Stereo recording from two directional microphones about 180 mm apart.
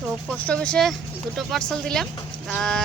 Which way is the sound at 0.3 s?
5° left (ahead or behind).